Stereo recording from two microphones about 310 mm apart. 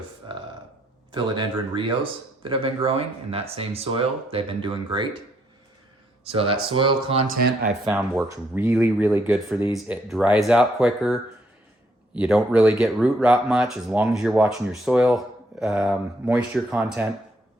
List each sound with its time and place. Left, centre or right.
0.2 s burping: centre
1.1 s speech: centre
6.2 s speech: centre
7.9 s speech: centre